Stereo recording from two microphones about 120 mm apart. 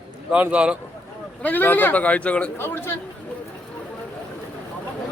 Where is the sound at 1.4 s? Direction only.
15° left (ahead or behind).